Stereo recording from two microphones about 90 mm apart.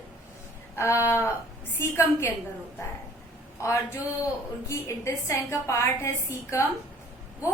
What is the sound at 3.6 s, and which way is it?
A woman's voice, 30° left (ahead or behind).